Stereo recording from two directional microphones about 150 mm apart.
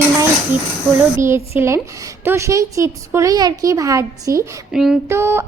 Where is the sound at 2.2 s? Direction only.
20° right (ahead or behind).